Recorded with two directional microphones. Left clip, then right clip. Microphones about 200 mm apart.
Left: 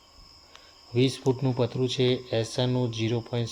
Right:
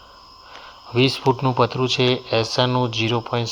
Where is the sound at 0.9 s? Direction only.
5° left (ahead or behind).